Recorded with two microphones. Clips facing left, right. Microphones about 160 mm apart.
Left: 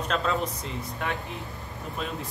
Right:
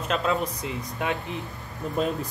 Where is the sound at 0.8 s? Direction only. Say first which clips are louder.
Right 3 dB; 15° right (ahead or behind).